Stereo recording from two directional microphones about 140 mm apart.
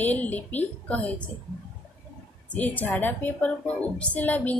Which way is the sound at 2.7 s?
15° left (ahead or behind).